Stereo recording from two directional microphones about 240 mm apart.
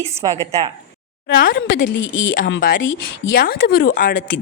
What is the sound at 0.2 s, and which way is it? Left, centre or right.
Speech, centre.